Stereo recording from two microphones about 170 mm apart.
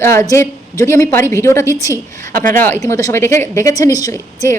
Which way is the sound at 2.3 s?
55° right (ahead or behind).